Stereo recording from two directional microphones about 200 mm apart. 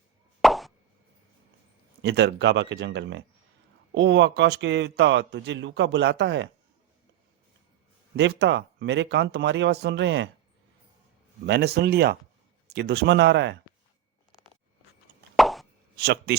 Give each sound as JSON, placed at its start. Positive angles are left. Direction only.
{"t": 0.4, "sound": "plop", "side_deg": 0}
{"t": 2.0, "sound": "a man's voice", "side_deg": -60}
{"t": 8.1, "sound": "a man's voice", "side_deg": -60}
{"t": 11.4, "sound": "a man's voice", "side_deg": -55}
{"t": 15.4, "sound": "plop", "side_deg": 0}
{"t": 16.0, "sound": "a man's voice", "side_deg": -50}